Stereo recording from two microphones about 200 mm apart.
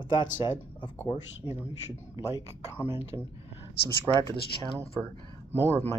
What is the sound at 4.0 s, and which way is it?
Speech, 20° right (ahead or behind).